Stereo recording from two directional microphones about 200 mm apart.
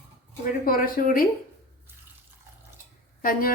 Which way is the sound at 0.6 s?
45° left (ahead or behind).